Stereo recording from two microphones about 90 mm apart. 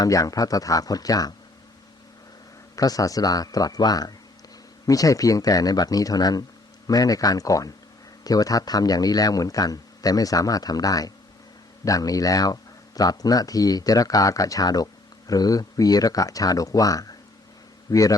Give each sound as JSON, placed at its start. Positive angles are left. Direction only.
{"t": 0.0, "sound": "speech", "side_deg": 40}
{"t": 2.7, "sound": "speech", "side_deg": 40}